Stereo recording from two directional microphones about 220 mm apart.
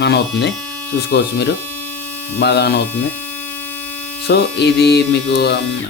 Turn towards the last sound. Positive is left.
turn(degrees=50)  # may be behind; listen again after turning